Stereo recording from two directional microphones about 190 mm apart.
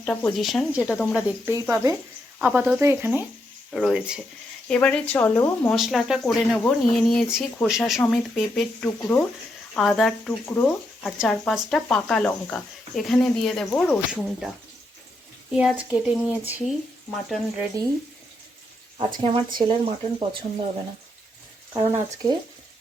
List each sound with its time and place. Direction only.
0.0 s speech: 5° left (ahead or behind); by 3.2 s 10° right (ahead or behind)
3.7 s speech: centre (ahead or behind)
4.7 s speech: 5° left (ahead or behind)
5.7 s speech: centre (ahead or behind)
15.5 s speech: 5° right (ahead or behind)
18.9 s speech: 25° right (ahead or behind)
21.7 s speech: 15° right (ahead or behind)